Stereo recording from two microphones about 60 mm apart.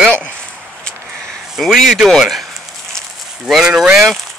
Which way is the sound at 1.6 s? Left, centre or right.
Centre.